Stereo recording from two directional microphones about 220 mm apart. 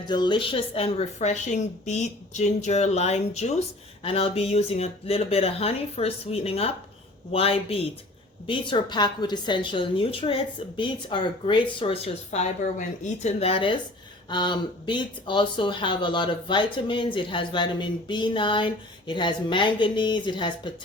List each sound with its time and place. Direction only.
0.1 s a woman's voice: 20° left (ahead or behind)